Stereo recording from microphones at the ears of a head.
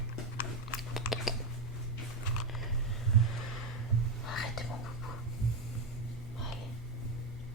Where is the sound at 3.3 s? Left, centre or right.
Left.